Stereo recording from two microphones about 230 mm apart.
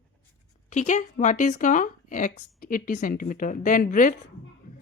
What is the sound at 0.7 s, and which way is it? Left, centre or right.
Speech, left.